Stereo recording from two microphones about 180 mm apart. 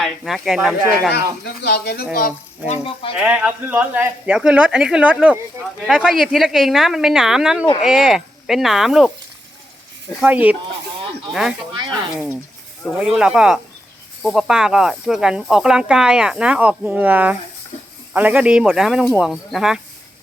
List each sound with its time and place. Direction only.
0.0 s speech: centre (ahead or behind)
1.1 s speech: 65° left (ahead or behind)
2.6 s speech: 30° left (ahead or behind)
3.2 s speech: 10° right (ahead or behind)
10.2 s speech: 10° right (ahead or behind)
11.7 s speech: 25° right (ahead or behind)
12.8 s speech: centre (ahead or behind)